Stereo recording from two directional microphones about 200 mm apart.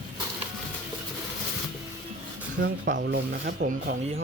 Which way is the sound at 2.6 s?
50° right (ahead or behind).